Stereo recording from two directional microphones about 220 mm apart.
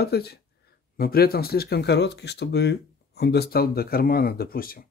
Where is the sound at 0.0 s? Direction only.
45° left (ahead or behind).